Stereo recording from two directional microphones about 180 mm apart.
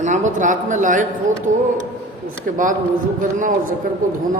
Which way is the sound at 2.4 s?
45° right (ahead or behind).